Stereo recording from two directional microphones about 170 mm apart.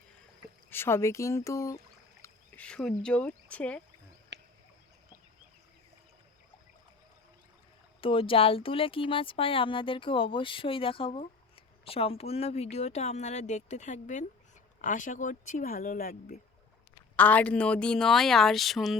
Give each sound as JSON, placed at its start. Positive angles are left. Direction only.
{"t": 0.7, "sound": "speech", "side_deg": 15}
{"t": 4.3, "sound": "a sound", "side_deg": -90}
{"t": 8.0, "sound": "speech", "side_deg": 30}
{"t": 17.2, "sound": "a woman's voice", "side_deg": 10}